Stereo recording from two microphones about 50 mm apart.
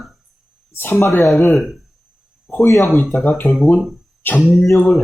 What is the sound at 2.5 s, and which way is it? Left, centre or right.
Speech, left.